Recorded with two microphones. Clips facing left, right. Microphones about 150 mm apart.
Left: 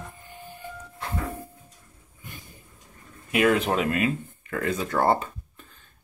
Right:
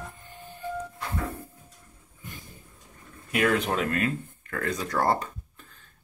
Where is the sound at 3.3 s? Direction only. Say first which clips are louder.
Left 3 dB; 10° left (ahead or behind).